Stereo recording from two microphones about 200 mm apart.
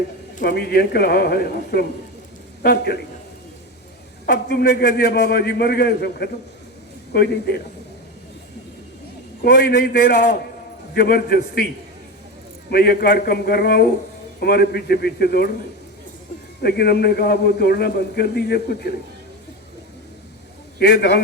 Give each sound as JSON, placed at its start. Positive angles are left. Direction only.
{"t": 0.4, "sound": "a man's voice", "side_deg": 55}
{"t": 4.3, "sound": "a man's voice", "side_deg": 50}
{"t": 9.4, "sound": "a man's voice", "side_deg": 50}
{"t": 12.7, "sound": "a man's voice", "side_deg": 50}
{"t": 16.6, "sound": "a man's voice", "side_deg": 50}
{"t": 20.7, "sound": "a man's voice", "side_deg": 50}